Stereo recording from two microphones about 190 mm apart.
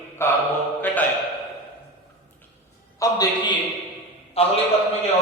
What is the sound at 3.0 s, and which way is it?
Speech, 20° left (ahead or behind).